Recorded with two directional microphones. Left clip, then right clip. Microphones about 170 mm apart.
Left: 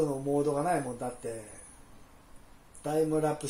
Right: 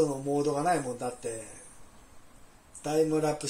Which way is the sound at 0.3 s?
20° left (ahead or behind).